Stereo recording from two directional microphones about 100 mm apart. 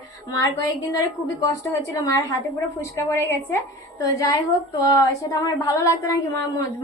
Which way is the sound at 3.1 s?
20° left (ahead or behind).